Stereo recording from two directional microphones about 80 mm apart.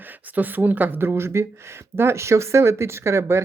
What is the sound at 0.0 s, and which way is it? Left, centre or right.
Speech, right.